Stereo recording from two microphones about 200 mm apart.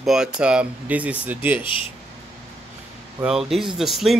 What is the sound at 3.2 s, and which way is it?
Speech, centre (ahead or behind).